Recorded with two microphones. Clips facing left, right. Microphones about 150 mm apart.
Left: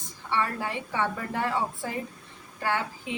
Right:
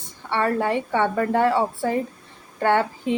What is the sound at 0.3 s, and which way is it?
A woman's voice, 60° right (ahead or behind).